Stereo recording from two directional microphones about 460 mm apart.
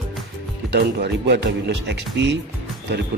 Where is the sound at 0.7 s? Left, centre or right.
Right.